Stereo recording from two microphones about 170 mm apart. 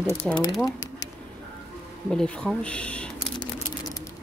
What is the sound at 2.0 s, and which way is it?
Speech, 5° left (ahead or behind).